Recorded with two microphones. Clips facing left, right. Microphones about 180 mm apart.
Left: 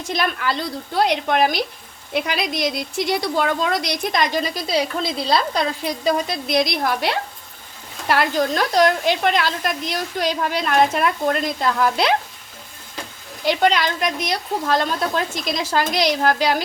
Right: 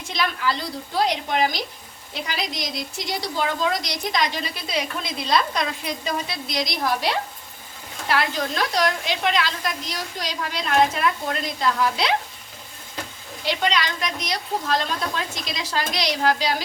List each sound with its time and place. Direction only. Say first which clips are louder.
0.0 s a woman's voice: left 2 dB; 50° left (ahead or behind); by 5.6 s 35° left (ahead or behind)
6.1 s speech: left 10 dB; 50° left (ahead or behind)
8.0 s a woman's voice: left 5 dB; 45° left (ahead or behind)
13.4 s a woman's voice: left 6 dB; 45° left (ahead or behind)